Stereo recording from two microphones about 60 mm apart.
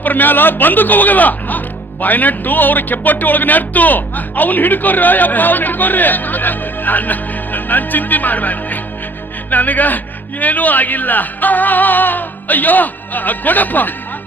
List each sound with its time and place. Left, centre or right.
0.0 s speech: left